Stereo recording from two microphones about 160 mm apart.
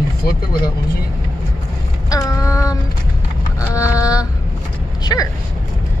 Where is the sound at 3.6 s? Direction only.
20° left (ahead or behind).